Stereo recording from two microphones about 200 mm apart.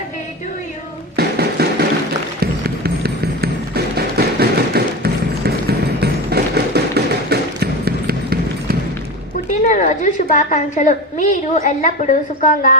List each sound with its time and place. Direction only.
1.1 s a sound: 50° right (ahead or behind)
2.4 s run: 50° right (ahead or behind)
9.6 s a woman's voice: 40° left (ahead or behind)